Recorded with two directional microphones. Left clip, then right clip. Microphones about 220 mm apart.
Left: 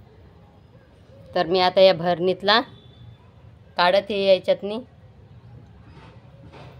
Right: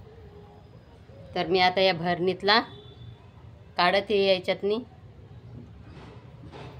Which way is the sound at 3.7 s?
30° left (ahead or behind).